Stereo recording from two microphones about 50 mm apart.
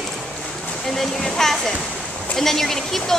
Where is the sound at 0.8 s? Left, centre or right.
Centre.